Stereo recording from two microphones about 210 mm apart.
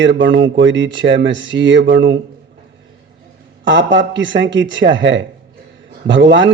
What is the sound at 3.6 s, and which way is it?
A man's voice, 60° right (ahead or behind).